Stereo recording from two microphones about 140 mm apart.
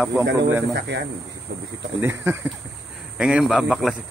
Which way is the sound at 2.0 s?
20° right (ahead or behind).